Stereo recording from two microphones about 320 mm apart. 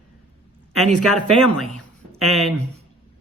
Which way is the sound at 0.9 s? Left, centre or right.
Right.